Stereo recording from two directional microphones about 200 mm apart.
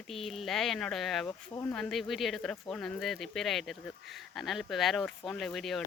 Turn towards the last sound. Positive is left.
turn(degrees=0)  # may be behind; listen again after turning